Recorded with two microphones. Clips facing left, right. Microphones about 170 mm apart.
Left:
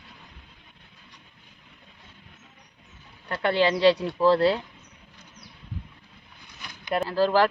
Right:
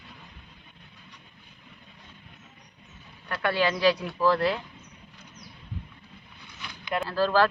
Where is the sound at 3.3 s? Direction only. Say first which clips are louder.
Left 3 dB; 25° left (ahead or behind).